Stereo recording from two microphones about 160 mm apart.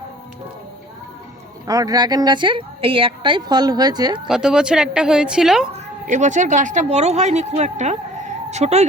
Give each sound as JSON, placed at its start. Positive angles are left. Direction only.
{"t": 1.6, "sound": "a woman's voice", "side_deg": -20}
{"t": 4.3, "sound": "a woman's voice", "side_deg": -5}
{"t": 5.7, "sound": "speech", "side_deg": -50}